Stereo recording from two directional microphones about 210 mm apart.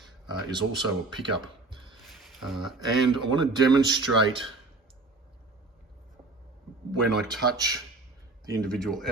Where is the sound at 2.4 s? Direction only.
Centre (ahead or behind).